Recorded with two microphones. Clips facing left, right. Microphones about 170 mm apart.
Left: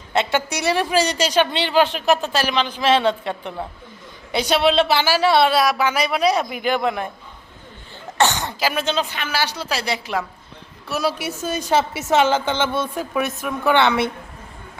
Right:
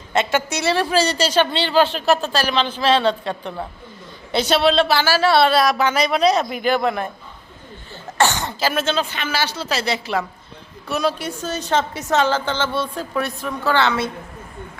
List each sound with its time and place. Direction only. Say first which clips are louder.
0.1 s a woman's voice: right 1 dB; 15° left (ahead or behind)
8.2 s a woman's voice: even; 20° left (ahead or behind)